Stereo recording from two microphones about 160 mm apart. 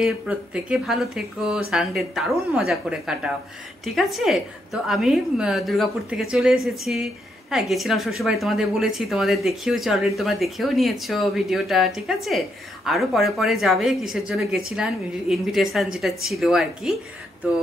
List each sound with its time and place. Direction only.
0.0 s speech: 5° right (ahead or behind)